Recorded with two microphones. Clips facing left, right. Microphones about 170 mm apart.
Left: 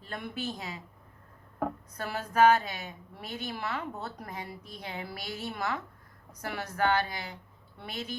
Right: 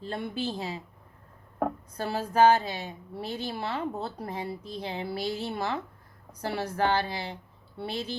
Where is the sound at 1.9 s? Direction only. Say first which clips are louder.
Right 3 dB; 30° right (ahead or behind).